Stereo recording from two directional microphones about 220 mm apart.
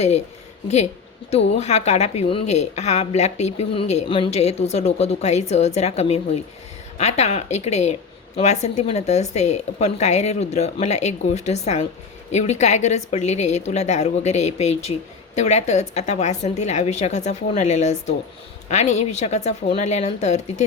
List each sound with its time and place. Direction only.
1.5 s a woman's voice: 30° left (ahead or behind)